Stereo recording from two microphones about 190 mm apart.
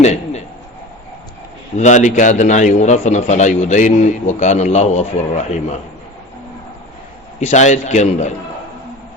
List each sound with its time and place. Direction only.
0.0 s a sound: 35° left (ahead or behind)
1.7 s a man's voice: 40° left (ahead or behind)
7.3 s a man's voice: 40° left (ahead or behind)